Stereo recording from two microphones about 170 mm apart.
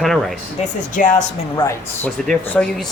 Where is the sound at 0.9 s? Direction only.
50° left (ahead or behind).